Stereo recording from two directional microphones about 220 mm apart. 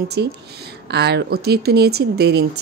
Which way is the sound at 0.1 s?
50° right (ahead or behind).